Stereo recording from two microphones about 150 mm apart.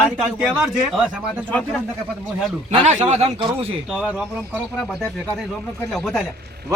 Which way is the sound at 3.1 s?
45° right (ahead or behind).